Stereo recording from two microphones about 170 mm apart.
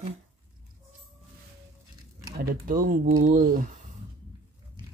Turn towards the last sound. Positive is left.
turn(degrees=-50)  # may be behind; listen again after turning